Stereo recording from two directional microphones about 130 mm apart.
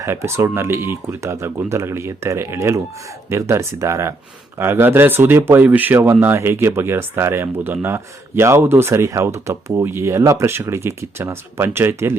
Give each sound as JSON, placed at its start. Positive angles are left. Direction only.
{"t": 0.0, "sound": "speech", "side_deg": -20}